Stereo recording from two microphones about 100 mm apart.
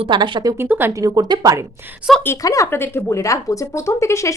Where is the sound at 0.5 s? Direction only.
25° right (ahead or behind).